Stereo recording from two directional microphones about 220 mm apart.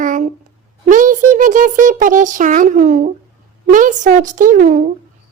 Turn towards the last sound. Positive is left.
turn(degrees=-35)  # may be behind; listen again after turning